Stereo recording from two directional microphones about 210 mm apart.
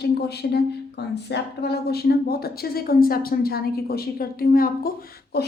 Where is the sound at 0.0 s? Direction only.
50° left (ahead or behind).